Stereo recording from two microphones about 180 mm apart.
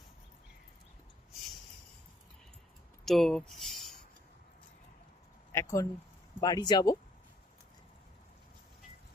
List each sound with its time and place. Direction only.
3.1 s speech: centre (ahead or behind)
5.5 s speech: 15° left (ahead or behind)